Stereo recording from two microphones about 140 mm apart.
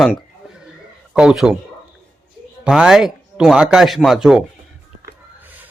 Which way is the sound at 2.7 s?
5° right (ahead or behind).